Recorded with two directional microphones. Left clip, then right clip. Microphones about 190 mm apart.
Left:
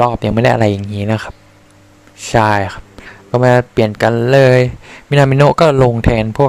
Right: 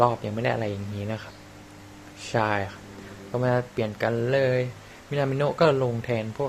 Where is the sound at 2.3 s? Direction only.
55° left (ahead or behind).